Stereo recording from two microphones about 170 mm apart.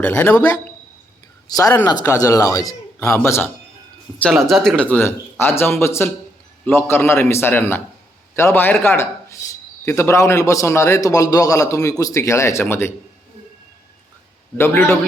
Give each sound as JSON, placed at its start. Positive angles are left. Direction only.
{"t": 0.0, "sound": "a man's voice", "side_deg": 10}
{"t": 1.5, "sound": "speech", "side_deg": 20}
{"t": 4.2, "sound": "a man's voice", "side_deg": 0}
{"t": 14.6, "sound": "a man's voice", "side_deg": 15}